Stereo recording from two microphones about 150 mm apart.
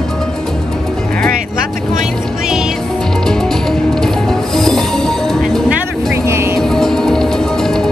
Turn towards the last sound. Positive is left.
turn(degrees=5)  # may be behind; listen again after turning